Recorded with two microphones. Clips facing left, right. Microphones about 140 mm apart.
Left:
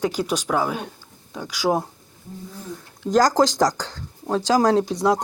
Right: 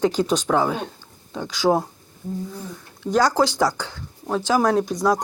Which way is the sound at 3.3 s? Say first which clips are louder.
Left 1 dB; 40° left (ahead or behind).